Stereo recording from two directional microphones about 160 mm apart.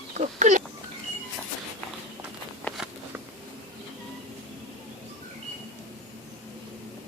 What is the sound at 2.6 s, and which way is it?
Walk, centre (ahead or behind).